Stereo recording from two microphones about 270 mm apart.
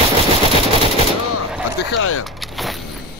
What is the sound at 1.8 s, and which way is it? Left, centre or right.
Speech, left.